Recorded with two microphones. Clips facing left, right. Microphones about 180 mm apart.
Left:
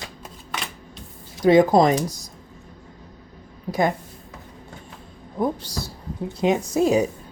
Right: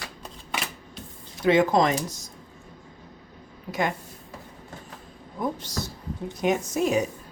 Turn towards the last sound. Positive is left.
turn(degrees=30)  # may be behind; listen again after turning